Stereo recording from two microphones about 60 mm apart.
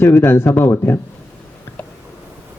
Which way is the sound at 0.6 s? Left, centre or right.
Left.